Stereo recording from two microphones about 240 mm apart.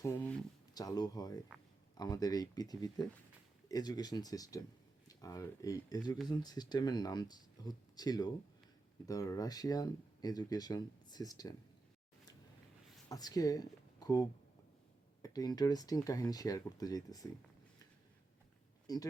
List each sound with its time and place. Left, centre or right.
0.0 s speech: centre
13.1 s speech: centre
18.9 s speech: centre